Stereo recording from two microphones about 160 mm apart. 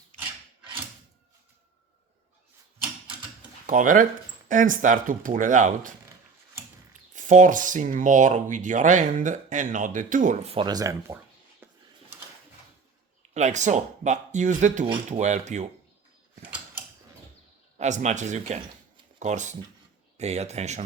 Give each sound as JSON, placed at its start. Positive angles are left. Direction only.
{"t": 3.7, "sound": "speech", "side_deg": -55}
{"t": 7.1, "sound": "speech", "side_deg": -50}
{"t": 10.5, "sound": "speech", "side_deg": -30}
{"t": 11.6, "sound": "a sound", "side_deg": -15}
{"t": 13.3, "sound": "speech", "side_deg": -45}
{"t": 16.4, "sound": "mechanisms", "side_deg": -10}
{"t": 17.7, "sound": "speech", "side_deg": -45}